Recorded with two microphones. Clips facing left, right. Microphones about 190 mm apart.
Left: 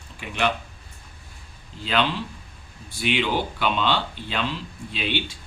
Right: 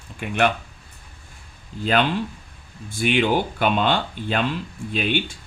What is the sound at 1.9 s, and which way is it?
Speech, 50° right (ahead or behind).